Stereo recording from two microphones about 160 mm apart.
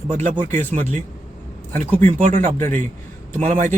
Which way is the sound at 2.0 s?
55° right (ahead or behind).